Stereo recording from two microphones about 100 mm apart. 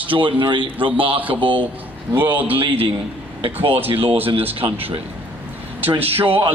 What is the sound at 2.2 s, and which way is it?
Speech, 15° right (ahead or behind).